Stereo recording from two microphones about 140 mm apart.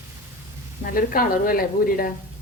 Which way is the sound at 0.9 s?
90° left.